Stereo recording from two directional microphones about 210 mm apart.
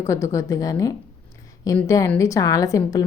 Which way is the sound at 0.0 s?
15° left (ahead or behind).